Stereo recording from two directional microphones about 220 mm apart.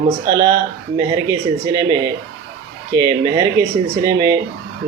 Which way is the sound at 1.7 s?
15° right (ahead or behind).